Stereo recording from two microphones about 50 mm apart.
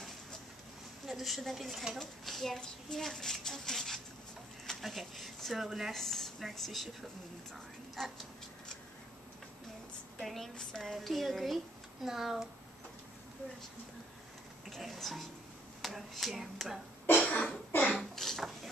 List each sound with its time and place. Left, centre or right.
1.0 s a child's voice: centre
10.2 s speech: centre
14.8 s speech: centre
17.2 s cough: centre
17.9 s a child's voice: centre